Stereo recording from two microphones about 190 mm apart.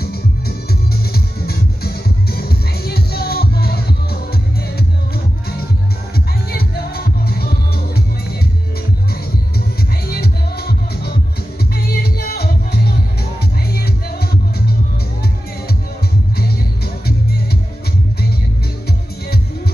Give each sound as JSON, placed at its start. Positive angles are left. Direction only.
{"t": 0.0, "sound": "music", "side_deg": 55}
{"t": 6.1, "sound": "music", "side_deg": 55}
{"t": 10.0, "sound": "music", "side_deg": 55}
{"t": 16.3, "sound": "music", "side_deg": 55}